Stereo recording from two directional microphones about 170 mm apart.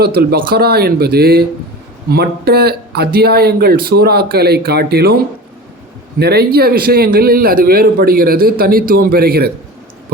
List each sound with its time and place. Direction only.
0.0 s a man's voice: 65° right (ahead or behind)